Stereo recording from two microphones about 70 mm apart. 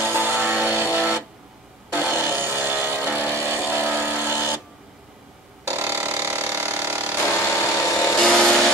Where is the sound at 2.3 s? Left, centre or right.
Right.